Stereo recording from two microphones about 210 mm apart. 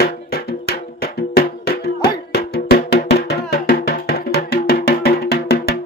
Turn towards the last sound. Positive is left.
turn(degrees=50)  # may be behind; listen again after turning